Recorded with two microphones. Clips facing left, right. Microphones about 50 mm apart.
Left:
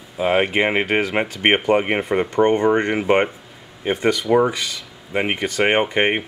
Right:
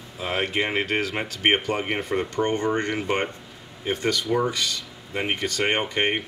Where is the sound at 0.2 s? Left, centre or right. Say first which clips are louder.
Left 8 dB; left.